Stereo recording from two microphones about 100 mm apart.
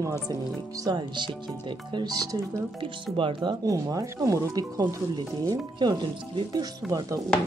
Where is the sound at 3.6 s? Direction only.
35° right (ahead or behind).